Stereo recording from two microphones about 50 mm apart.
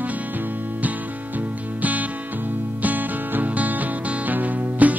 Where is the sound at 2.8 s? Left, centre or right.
Right.